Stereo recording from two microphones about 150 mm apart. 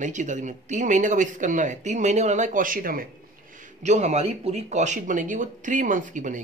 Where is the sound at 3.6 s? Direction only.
50° right (ahead or behind).